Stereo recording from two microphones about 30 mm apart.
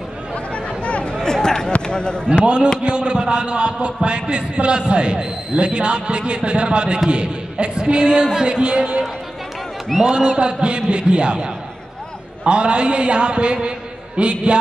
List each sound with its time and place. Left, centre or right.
0.5 s chatter: left
1.2 s a sound: left
1.9 s speech: left
2.4 s a man's voice: right
10.0 s a man's voice: right